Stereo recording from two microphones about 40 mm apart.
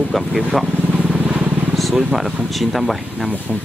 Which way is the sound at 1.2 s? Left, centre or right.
Right.